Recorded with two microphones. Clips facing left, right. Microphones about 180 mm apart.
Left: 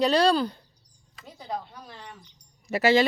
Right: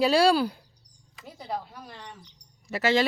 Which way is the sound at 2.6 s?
15° left (ahead or behind).